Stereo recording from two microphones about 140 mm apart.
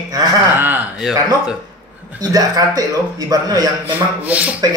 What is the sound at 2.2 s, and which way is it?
Speech, 25° right (ahead or behind).